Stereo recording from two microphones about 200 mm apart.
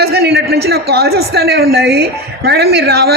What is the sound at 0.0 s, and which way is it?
A man's voice, 50° right (ahead or behind).